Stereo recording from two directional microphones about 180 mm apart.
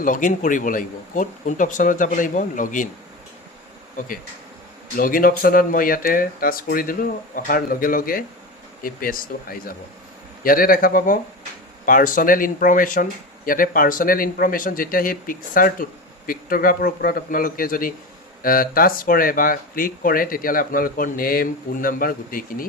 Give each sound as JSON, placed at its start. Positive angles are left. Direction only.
{"t": 0.0, "sound": "speech", "side_deg": 45}
{"t": 4.9, "sound": "speech", "side_deg": 50}